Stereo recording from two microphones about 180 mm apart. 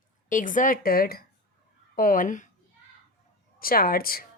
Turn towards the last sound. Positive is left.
turn(degrees=55)  # may be behind; listen again after turning